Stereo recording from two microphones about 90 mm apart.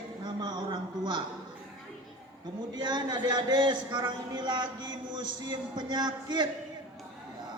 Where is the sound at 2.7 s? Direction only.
55° right (ahead or behind).